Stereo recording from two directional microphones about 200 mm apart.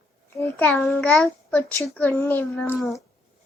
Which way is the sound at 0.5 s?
5° left (ahead or behind).